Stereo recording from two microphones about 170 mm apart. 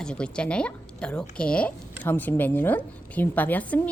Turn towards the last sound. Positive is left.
turn(degrees=10)  # may be behind; listen again after turning